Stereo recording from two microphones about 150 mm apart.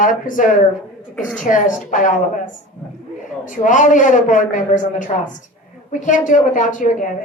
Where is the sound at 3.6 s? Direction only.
60° left (ahead or behind).